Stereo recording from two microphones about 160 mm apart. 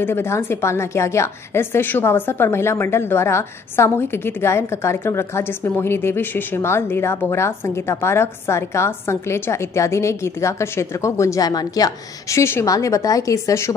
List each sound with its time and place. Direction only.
0.0 s a woman's voice: 15° left (ahead or behind)